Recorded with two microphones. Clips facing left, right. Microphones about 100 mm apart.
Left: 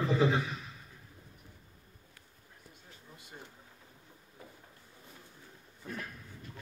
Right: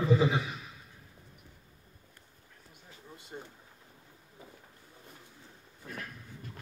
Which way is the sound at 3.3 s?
20° right (ahead or behind).